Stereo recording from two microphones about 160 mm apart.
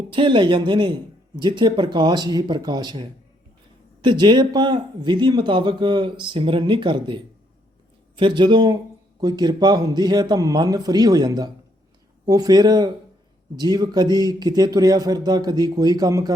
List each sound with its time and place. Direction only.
0.1 s speech: 30° right (ahead or behind)